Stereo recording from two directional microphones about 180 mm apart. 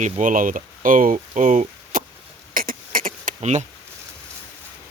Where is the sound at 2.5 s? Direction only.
50° right (ahead or behind).